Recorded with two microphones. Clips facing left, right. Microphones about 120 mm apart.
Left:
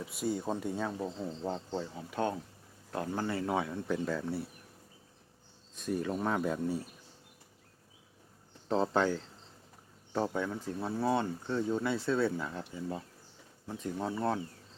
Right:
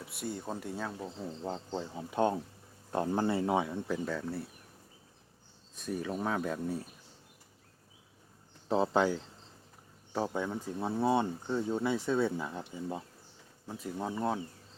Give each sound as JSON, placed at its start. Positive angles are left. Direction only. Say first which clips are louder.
{"t": 0.0, "sound": "speech", "louder": "left 5 dB", "side_deg": 0}
{"t": 1.0, "sound": "speech", "louder": "left 3 dB", "side_deg": 20}
{"t": 2.0, "sound": "speech", "louder": "right 6 dB", "side_deg": -25}
{"t": 3.8, "sound": "speech", "louder": "left 1 dB", "side_deg": 0}
{"t": 5.7, "sound": "speech", "louder": "left 2 dB", "side_deg": 0}
{"t": 8.6, "sound": "speech", "louder": "right 1 dB", "side_deg": -10}